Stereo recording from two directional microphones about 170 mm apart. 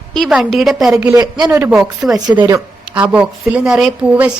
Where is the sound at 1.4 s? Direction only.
10° right (ahead or behind).